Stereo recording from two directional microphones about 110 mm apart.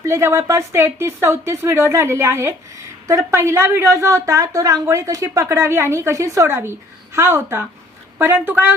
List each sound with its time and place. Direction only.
0.0 s speech: 25° right (ahead or behind)